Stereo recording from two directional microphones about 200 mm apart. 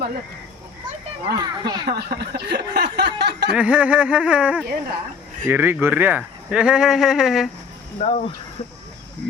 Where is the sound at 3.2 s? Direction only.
55° right (ahead or behind).